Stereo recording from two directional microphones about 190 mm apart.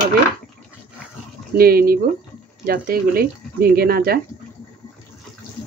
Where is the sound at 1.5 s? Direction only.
50° right (ahead or behind).